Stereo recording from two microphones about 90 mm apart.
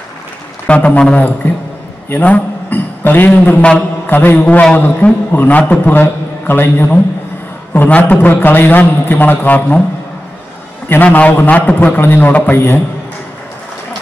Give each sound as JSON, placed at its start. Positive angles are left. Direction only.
{"t": 0.7, "sound": "a man's voice", "side_deg": 15}
{"t": 10.9, "sound": "a man's voice", "side_deg": 20}